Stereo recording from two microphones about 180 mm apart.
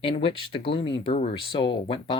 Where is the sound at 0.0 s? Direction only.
30° left (ahead or behind).